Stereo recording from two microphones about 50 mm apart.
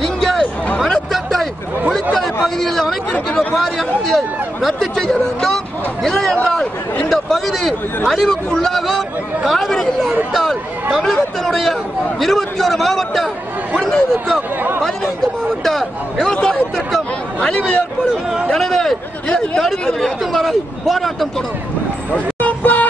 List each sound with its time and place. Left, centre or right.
0.0 s a sound: centre
3.1 s speech: centre
6.4 s chatter: left
7.1 s a sound: centre
8.1 s a man's voice: centre
15.6 s a man's voice: centre
17.4 s speech: centre
18.5 s a man's voice: centre
19.2 s speech: centre
19.8 s a man's voice: centre
22.1 s a sound: left